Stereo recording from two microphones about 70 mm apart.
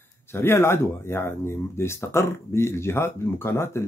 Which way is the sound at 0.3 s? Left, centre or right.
Left.